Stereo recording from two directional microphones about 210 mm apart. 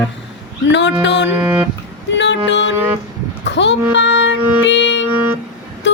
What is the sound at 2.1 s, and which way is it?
Music, 55° left (ahead or behind).